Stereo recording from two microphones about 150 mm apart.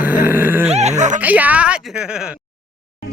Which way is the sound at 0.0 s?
10° right (ahead or behind).